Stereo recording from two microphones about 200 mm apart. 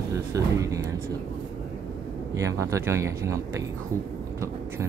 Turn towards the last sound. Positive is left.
turn(degrees=-15)  # may be behind; listen again after turning